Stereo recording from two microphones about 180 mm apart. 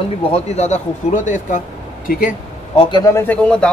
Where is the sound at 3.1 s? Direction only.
5° left (ahead or behind).